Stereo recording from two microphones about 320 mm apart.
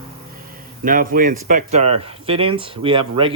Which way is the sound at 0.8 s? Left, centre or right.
Right.